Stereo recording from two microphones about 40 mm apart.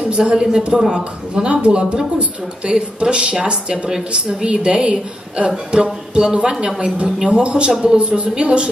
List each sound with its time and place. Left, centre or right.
0.1 s speech: right